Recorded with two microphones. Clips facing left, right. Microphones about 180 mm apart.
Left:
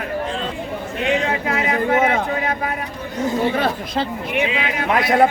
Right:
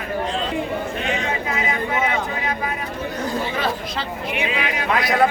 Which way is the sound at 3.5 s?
55° left (ahead or behind).